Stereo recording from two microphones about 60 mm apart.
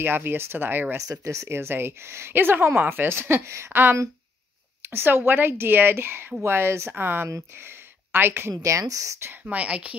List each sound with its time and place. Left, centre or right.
0.0 s a woman's voice: right
1.0 s a woman's voice: right
8.6 s speech: right
9.2 s speech: right